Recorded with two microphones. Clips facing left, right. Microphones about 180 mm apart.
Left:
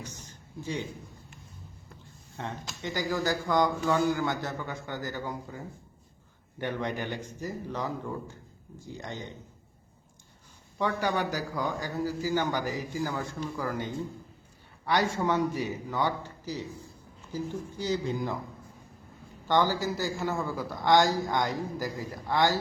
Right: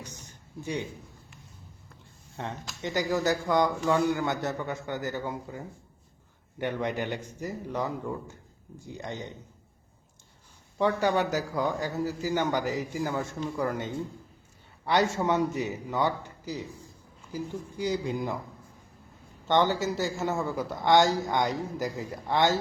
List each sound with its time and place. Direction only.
0.1 s a sound: 20° right (ahead or behind)
2.4 s a man's voice: 20° right (ahead or behind)
10.8 s a man's voice: 20° right (ahead or behind)
19.5 s a man's voice: 20° right (ahead or behind)